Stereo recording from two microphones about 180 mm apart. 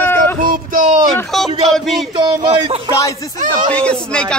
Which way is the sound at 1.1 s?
Centre (ahead or behind).